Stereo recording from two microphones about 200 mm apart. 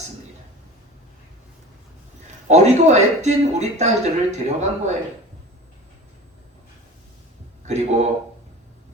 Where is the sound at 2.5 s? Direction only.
35° right (ahead or behind).